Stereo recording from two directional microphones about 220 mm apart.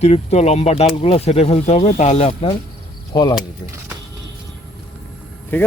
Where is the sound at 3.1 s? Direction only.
20° left (ahead or behind).